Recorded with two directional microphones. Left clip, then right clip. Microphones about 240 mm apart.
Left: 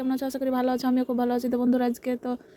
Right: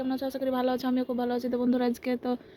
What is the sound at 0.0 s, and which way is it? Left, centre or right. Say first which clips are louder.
Speech: left 2 dB; left.